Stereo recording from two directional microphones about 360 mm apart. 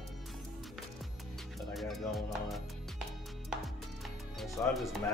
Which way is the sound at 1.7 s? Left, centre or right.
Centre.